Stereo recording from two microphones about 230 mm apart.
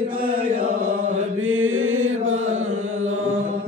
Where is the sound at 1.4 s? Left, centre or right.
Right.